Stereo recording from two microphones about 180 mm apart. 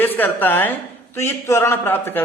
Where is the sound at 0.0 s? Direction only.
10° left (ahead or behind).